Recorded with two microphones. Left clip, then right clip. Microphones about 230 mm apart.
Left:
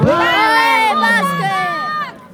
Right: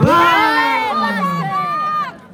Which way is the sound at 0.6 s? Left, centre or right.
Left.